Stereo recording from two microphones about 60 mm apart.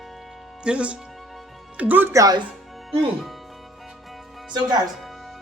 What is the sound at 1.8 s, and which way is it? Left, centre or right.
Speech, right.